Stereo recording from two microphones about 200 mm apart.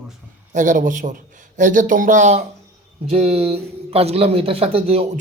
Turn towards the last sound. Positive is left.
turn(degrees=-30)  # may be behind; listen again after turning